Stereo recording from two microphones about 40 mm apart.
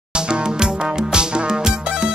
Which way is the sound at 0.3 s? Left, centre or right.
Right.